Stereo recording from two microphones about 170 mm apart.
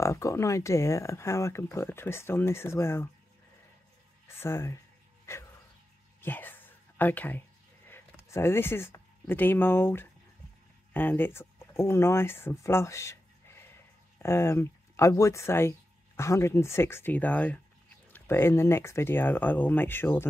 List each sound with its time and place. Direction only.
0.0 s speech: 15° left (ahead or behind)
4.3 s speech: 15° left (ahead or behind)
5.2 s dog: 15° left (ahead or behind)
6.2 s a sound: 10° left (ahead or behind)
10.9 s speech: 10° left (ahead or behind)